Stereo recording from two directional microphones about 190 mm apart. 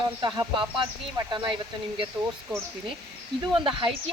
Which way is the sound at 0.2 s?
25° right (ahead or behind).